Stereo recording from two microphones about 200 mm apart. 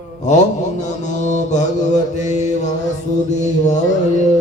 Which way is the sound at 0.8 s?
35° left (ahead or behind).